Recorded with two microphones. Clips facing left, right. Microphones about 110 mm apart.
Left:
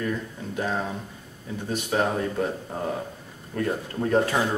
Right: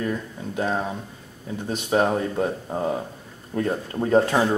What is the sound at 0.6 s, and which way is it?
Speech, 20° right (ahead or behind).